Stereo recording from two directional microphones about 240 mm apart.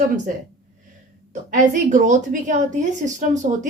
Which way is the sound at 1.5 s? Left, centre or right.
Right.